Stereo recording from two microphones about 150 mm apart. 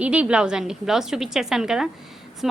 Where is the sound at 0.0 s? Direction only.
10° right (ahead or behind).